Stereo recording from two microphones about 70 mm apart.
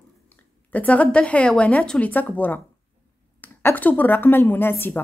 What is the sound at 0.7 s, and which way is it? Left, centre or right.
A woman's voice, left.